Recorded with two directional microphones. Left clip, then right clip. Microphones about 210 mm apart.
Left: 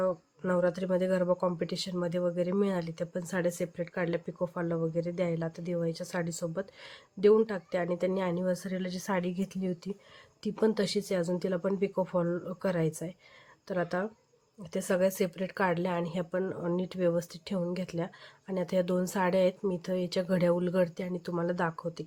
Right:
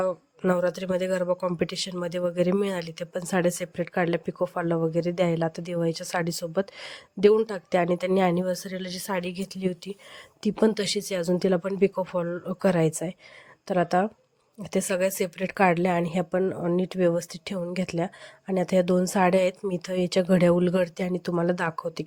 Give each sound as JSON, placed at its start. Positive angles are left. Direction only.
{"t": 0.0, "sound": "speech", "side_deg": -40}